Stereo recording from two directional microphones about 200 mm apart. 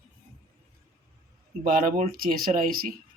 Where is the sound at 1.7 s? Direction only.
45° right (ahead or behind).